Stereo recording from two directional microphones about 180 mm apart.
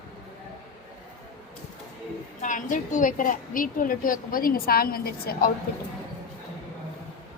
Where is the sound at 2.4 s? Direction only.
45° left (ahead or behind).